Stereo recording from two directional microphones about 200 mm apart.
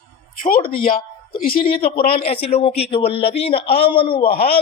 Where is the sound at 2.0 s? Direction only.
30° left (ahead or behind).